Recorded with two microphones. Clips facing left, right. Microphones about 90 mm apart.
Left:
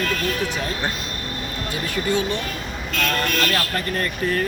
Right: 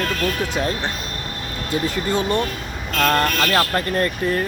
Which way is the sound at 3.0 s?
45° right (ahead or behind).